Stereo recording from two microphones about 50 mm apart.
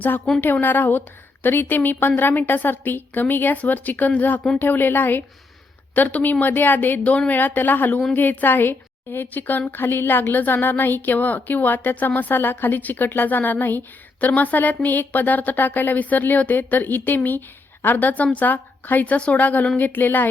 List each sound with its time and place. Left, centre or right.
0.6 s speech: left
5.9 s speech: left